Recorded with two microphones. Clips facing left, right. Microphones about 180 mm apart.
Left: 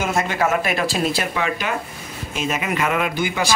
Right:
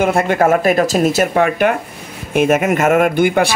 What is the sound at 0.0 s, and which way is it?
A man's voice, 60° right (ahead or behind).